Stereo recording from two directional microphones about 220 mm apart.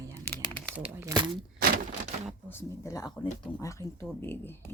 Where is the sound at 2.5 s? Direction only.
10° left (ahead or behind).